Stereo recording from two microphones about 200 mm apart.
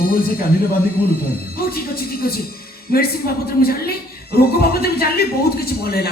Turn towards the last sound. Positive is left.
turn(degrees=50)  # may be behind; listen again after turning